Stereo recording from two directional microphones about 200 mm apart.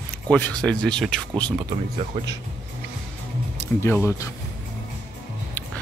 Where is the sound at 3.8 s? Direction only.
10° left (ahead or behind).